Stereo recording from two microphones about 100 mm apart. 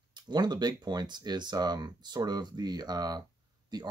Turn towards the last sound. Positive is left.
turn(degrees=-45)  # may be behind; listen again after turning